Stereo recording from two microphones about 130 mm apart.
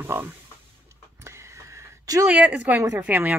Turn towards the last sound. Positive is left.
turn(degrees=-15)  # may be behind; listen again after turning